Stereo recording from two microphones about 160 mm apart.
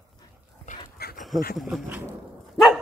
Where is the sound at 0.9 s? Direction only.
75° left (ahead or behind).